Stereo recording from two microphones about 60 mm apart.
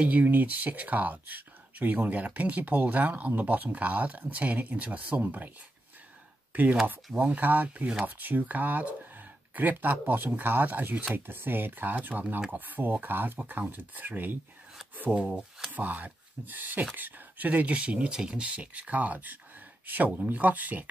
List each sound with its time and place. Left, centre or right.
0.0 s speech: right
6.5 s speech: right
15.0 s speech: right